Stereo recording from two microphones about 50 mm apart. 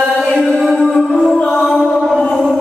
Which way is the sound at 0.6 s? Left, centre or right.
Centre.